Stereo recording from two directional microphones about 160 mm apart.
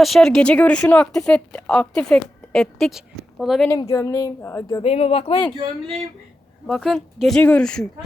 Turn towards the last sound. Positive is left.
turn(degrees=5)  # may be behind; listen again after turning